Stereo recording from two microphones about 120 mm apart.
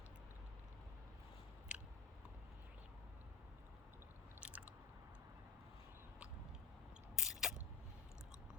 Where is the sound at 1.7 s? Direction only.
10° right (ahead or behind).